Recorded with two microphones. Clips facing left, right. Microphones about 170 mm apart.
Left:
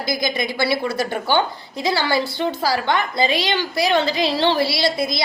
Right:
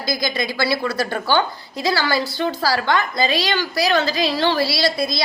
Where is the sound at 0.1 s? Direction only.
20° left (ahead or behind).